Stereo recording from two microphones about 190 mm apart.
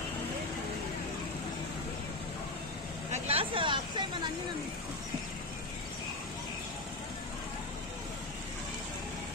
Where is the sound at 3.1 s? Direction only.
30° right (ahead or behind).